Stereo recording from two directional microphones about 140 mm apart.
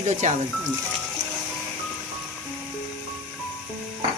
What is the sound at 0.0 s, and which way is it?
Speech, 55° right (ahead or behind).